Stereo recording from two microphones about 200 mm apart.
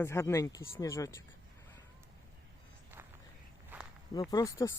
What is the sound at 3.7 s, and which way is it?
Walk, 10° right (ahead or behind).